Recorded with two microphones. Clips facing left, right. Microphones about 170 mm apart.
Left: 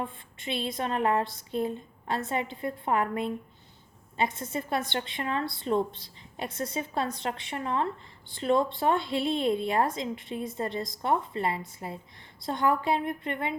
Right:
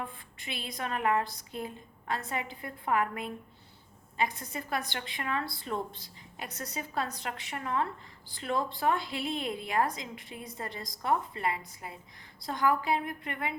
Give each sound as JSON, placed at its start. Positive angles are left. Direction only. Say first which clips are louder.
{"t": 0.0, "sound": "a woman's voice", "louder": "left 5 dB", "side_deg": 25}